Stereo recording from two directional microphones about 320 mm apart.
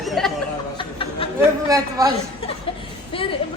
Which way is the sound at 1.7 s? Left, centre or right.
Centre.